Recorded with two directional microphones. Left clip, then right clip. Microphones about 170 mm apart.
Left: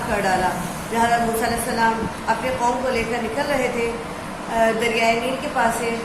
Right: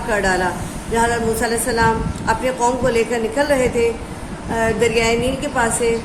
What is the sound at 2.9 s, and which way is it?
Speech, 45° right (ahead or behind).